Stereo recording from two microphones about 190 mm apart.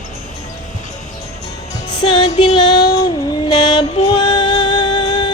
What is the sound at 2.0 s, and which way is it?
Music, 25° left (ahead or behind).